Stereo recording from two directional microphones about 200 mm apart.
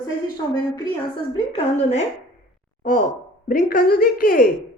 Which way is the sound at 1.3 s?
30° left (ahead or behind).